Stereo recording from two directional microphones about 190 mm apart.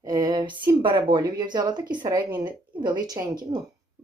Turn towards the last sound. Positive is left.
turn(degrees=-20)  # may be behind; listen again after turning